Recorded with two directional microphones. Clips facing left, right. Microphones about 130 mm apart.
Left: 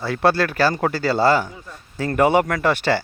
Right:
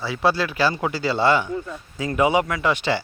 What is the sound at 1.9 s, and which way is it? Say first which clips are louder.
Speech: left 3 dB; 60° left (ahead or behind).